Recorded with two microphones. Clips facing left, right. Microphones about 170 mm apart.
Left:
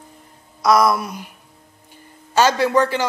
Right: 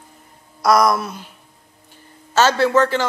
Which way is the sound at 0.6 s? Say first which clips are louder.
Even; 5° left (ahead or behind).